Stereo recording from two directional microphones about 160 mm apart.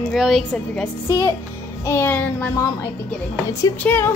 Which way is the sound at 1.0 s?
20° left (ahead or behind).